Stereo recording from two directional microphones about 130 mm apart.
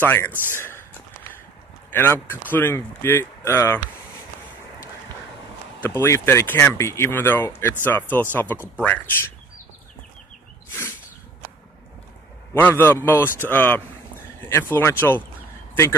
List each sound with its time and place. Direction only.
0.0 s speech: 15° left (ahead or behind)
0.6 s a sound: 20° left (ahead or behind)
1.9 s speech: 15° left (ahead or behind)
5.8 s speech: 20° left (ahead or behind)
12.5 s speech: 15° left (ahead or behind)